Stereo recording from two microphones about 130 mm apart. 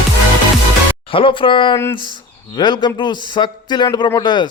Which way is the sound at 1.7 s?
20° left (ahead or behind).